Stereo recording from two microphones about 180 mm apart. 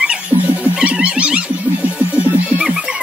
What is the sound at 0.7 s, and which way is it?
Cat, 5° right (ahead or behind).